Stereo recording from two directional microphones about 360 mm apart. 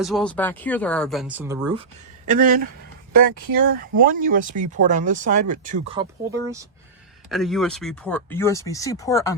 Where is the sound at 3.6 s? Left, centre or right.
Right.